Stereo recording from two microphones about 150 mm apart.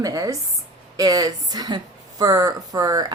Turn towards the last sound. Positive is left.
turn(degrees=-25)  # may be behind; listen again after turning